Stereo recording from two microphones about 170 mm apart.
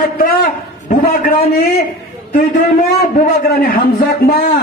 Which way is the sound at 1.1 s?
55° left (ahead or behind).